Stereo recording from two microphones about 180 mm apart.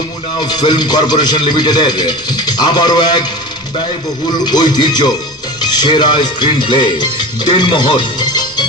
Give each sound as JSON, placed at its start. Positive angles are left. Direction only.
{"t": 0.3, "sound": "a man's voice", "side_deg": 25}
{"t": 4.3, "sound": "a man's voice", "side_deg": 25}